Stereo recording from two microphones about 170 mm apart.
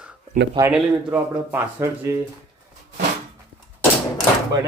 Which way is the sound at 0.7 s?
10° right (ahead or behind).